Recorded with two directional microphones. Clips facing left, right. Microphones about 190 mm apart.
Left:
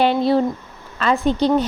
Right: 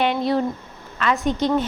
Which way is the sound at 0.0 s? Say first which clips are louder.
Left 4 dB; 30° left (ahead or behind).